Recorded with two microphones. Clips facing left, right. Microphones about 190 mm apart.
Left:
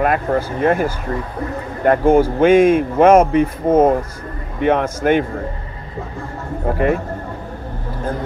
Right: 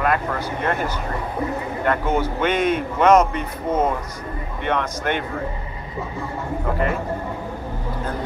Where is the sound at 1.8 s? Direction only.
45° left (ahead or behind).